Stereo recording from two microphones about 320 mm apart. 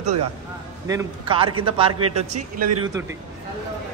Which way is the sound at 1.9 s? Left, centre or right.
Right.